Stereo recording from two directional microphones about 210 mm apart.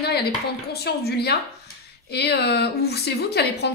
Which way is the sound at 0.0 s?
50° left (ahead or behind).